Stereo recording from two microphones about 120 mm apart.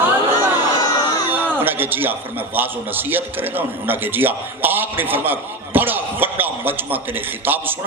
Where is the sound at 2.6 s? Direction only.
15° right (ahead or behind).